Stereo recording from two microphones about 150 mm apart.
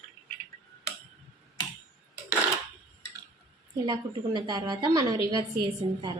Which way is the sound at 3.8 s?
30° right (ahead or behind).